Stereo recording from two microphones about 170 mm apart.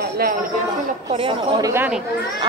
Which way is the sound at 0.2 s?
55° right (ahead or behind).